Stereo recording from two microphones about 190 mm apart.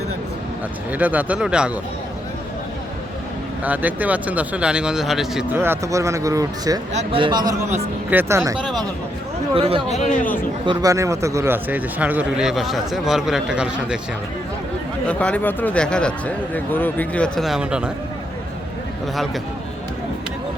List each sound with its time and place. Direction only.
0.9 s speech: 10° right (ahead or behind)
3.6 s speech: 10° right (ahead or behind)
6.9 s a man's voice: 30° right (ahead or behind)
8.6 s speech: centre (ahead or behind)
9.6 s a man's voice: 30° right (ahead or behind)
9.9 s speech: 40° left (ahead or behind)
10.7 s speech: 15° right (ahead or behind)
15.0 s speech: 5° left (ahead or behind)